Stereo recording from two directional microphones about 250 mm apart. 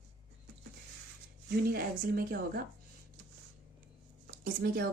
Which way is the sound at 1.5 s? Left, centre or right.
Right.